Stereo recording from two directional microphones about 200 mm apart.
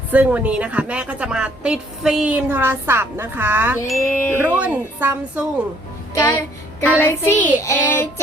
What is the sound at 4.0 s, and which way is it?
Child singing, 15° left (ahead or behind).